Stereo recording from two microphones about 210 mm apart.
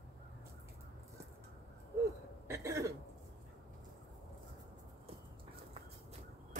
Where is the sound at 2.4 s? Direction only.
15° right (ahead or behind).